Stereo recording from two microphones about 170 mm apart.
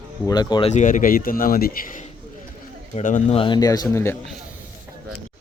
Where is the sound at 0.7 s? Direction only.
45° left (ahead or behind).